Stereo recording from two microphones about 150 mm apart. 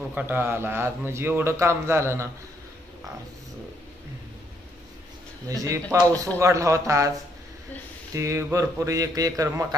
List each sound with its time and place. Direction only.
0.1 s a man's voice: 10° right (ahead or behind)
5.5 s a man's voice: 20° right (ahead or behind)
8.1 s a man's voice: 20° right (ahead or behind)